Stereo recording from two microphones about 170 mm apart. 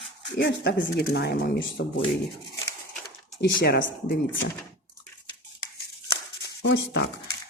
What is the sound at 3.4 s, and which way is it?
Speech, 80° left.